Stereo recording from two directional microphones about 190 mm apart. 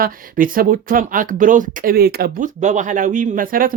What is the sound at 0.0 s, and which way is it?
Speech, 45° right (ahead or behind).